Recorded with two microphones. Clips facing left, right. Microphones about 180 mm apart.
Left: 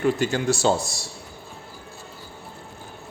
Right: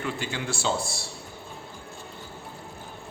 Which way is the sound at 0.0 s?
45° left (ahead or behind).